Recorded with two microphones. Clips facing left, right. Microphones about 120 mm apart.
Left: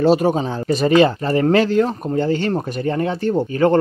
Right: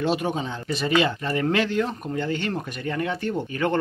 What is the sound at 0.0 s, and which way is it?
Speech, 40° left (ahead or behind).